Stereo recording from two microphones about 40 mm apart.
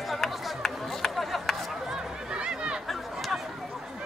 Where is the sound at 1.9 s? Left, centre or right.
Right.